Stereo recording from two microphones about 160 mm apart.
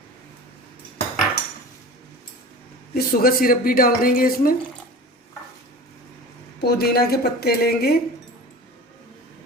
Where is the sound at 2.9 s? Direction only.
65° left (ahead or behind).